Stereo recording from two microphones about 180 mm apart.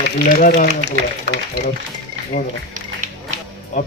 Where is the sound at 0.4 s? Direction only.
50° left (ahead or behind).